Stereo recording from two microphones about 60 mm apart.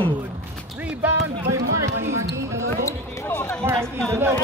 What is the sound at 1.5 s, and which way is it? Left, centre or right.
Speech, right.